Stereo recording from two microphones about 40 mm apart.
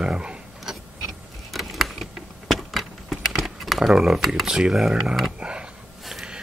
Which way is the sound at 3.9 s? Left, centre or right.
Centre.